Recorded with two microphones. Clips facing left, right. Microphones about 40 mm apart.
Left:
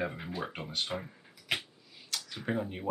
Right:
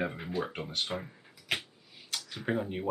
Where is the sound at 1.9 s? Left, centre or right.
Centre.